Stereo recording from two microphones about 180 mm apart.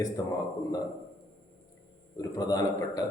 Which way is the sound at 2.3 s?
20° left (ahead or behind).